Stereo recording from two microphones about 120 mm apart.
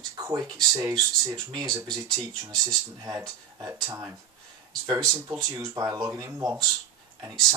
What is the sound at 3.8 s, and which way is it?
Speech, 25° right (ahead or behind).